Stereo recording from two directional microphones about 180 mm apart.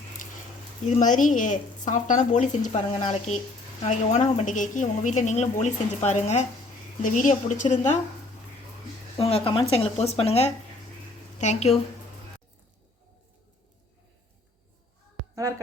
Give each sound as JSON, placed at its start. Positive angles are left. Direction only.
{"t": 0.2, "sound": "a sound", "side_deg": 45}
{"t": 0.9, "sound": "speech", "side_deg": 45}
{"t": 9.1, "sound": "a woman's voice", "side_deg": 30}
{"t": 15.4, "sound": "a woman's voice", "side_deg": -20}